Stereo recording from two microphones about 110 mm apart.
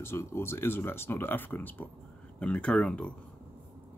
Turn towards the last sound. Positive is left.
turn(degrees=10)  # may be behind; listen again after turning